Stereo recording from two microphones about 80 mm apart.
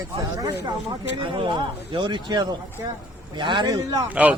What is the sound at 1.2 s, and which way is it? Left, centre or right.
Speech, right.